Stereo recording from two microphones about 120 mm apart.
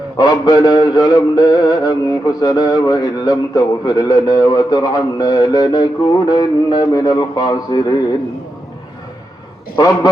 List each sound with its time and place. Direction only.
0.2 s music: 35° left (ahead or behind)
9.7 s music: 35° left (ahead or behind)